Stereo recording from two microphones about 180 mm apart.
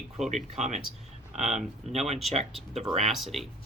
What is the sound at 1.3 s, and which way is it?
Speech, 35° right (ahead or behind).